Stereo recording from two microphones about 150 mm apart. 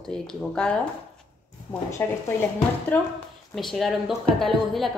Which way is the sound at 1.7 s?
20° left (ahead or behind).